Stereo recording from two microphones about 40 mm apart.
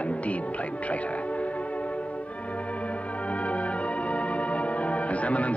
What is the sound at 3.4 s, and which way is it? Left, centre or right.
Music, left.